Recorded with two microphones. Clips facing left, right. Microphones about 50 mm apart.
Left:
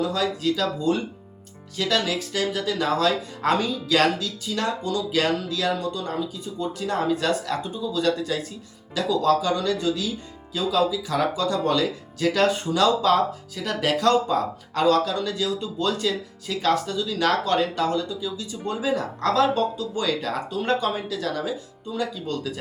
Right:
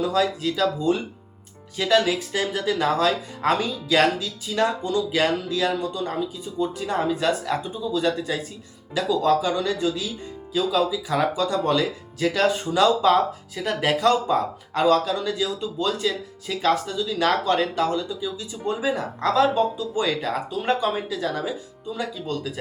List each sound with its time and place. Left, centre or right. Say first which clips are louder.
0.1 s speech: right 1 dB; centre